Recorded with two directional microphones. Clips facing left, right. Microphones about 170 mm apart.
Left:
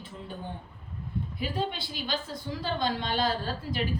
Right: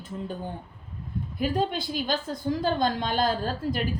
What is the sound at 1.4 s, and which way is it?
A woman's voice, 45° right (ahead or behind).